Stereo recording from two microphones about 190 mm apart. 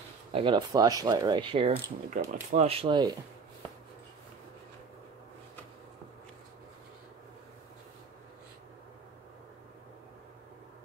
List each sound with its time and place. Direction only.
0.3 s speech: 25° right (ahead or behind)